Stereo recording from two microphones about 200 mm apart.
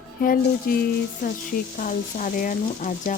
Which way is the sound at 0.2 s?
45° left (ahead or behind).